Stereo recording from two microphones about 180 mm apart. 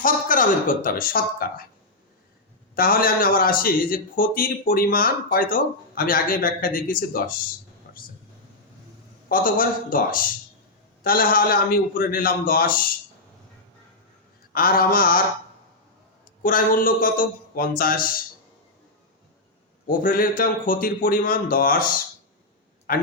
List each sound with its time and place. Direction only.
0.0 s a man's voice: 50° left (ahead or behind)
2.7 s a man's voice: 55° left (ahead or behind)
7.9 s a sound: 60° left (ahead or behind)
9.3 s a man's voice: 50° left (ahead or behind)
14.5 s a man's voice: 55° left (ahead or behind)
16.4 s a man's voice: 50° left (ahead or behind)
19.9 s a man's voice: 50° left (ahead or behind)